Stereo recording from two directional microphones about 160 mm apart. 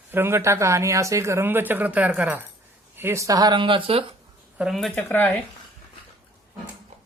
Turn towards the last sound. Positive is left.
turn(degrees=10)  # may be behind; listen again after turning